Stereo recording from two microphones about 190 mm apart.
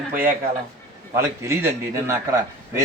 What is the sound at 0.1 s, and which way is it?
A man's voice, 10° right (ahead or behind).